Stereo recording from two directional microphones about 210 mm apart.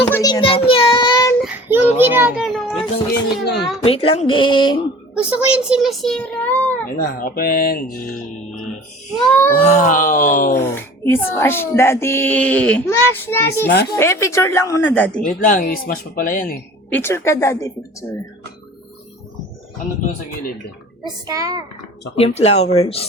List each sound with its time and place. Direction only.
0.0 s child singing: 15° left (ahead or behind)
1.4 s child singing: 10° right (ahead or behind)
2.0 s a child's voice: 10° right (ahead or behind)
3.4 s speech: 50° left (ahead or behind)
3.8 s speech: 25° left (ahead or behind)
5.1 s a child's voice: 5° right (ahead or behind)
7.0 s speech: 40° left (ahead or behind)
9.1 s a child's voice: 5° left (ahead or behind)
9.5 s speech: 40° left (ahead or behind)
10.8 s speech: 10° left (ahead or behind)
15.2 s speech: 40° left (ahead or behind)
16.9 s speech: 10° left (ahead or behind)
21.2 s a child's voice: 15° right (ahead or behind)
22.1 s speech: 30° left (ahead or behind)